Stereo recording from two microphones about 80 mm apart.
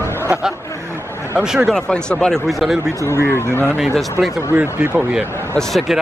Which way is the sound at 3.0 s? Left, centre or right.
Left.